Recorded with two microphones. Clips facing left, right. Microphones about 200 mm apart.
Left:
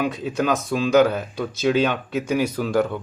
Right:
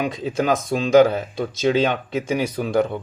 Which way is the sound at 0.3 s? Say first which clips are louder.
Right 4 dB; 30° right (ahead or behind).